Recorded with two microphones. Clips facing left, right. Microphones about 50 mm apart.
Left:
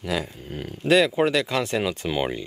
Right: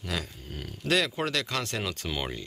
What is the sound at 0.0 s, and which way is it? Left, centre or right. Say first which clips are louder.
Speech: left 7 dB; centre.